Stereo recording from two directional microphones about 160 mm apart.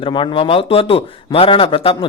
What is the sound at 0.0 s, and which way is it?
Speech, 30° left (ahead or behind).